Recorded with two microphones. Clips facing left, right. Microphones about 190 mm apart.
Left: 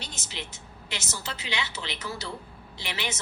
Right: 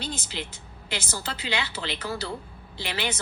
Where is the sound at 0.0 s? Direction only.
30° right (ahead or behind).